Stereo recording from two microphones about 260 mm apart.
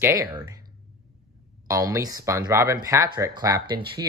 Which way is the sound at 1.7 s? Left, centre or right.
Centre.